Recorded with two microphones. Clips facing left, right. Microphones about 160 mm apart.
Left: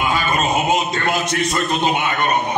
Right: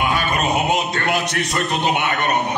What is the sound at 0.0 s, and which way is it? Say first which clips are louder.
A man's voice: left 1 dB; 65° right (ahead or behind).